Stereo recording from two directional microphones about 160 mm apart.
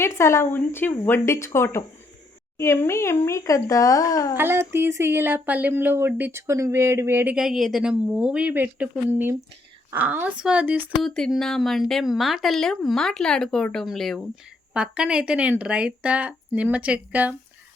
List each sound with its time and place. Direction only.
0.0 s a woman's voice: 15° left (ahead or behind)
4.4 s speech: 15° right (ahead or behind)
7.3 s speech: centre (ahead or behind)
11.0 s speech: centre (ahead or behind)